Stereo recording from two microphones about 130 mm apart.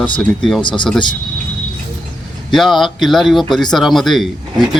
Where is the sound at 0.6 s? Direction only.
35° left (ahead or behind).